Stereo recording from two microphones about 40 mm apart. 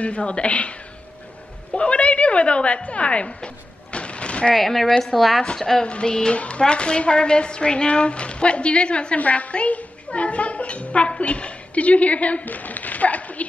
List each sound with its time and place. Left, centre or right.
0.0 s a woman's voice: left
4.6 s a woman's voice: centre
5.9 s a woman's voice: left